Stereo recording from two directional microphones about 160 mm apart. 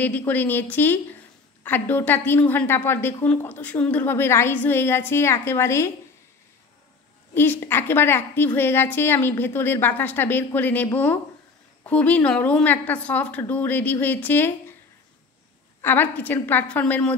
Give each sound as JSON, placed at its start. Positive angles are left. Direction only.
{"t": 0.2, "sound": "a woman's voice", "side_deg": 10}
{"t": 7.3, "sound": "a woman's voice", "side_deg": 15}
{"t": 15.8, "sound": "a woman's voice", "side_deg": 10}